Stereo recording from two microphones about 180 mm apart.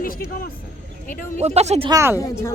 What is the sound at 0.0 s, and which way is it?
Speech, 55° left (ahead or behind).